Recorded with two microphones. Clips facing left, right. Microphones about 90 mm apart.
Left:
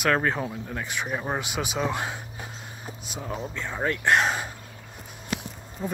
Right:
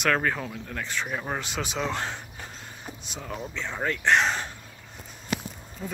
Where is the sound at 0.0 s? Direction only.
10° left (ahead or behind).